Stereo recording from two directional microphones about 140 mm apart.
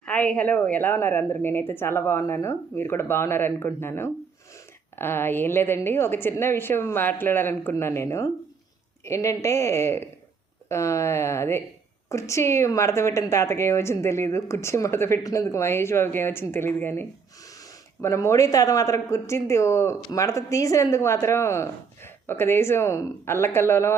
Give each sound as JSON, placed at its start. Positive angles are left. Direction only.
{"t": 0.0, "sound": "a woman's voice", "side_deg": 10}